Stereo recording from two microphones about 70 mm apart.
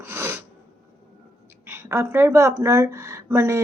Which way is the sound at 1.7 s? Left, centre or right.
Right.